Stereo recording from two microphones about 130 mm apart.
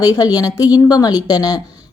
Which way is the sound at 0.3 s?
30° left (ahead or behind).